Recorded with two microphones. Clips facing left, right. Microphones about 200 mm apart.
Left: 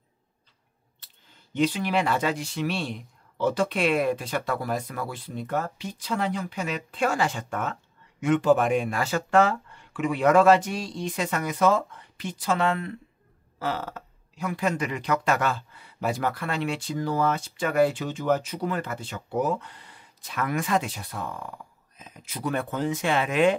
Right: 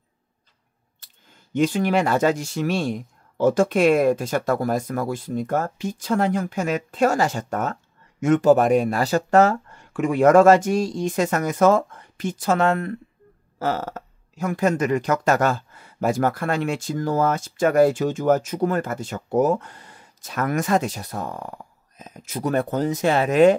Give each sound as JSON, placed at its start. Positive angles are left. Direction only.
{"t": 1.0, "sound": "speech", "side_deg": -45}